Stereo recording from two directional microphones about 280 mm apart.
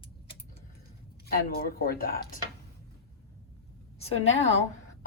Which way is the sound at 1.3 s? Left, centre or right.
Left.